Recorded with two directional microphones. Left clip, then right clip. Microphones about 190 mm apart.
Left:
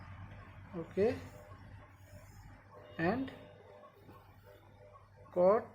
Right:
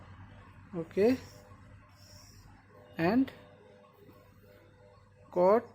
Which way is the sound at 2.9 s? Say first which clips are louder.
Right 6 dB; 50° right (ahead or behind).